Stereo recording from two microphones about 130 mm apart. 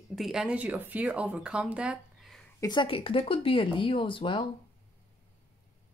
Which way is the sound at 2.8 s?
45° left (ahead or behind).